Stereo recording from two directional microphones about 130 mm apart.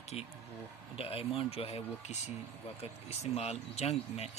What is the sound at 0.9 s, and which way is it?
Speech, 45° left (ahead or behind).